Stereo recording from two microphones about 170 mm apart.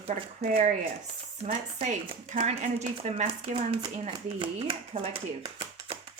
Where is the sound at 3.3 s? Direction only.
25° right (ahead or behind).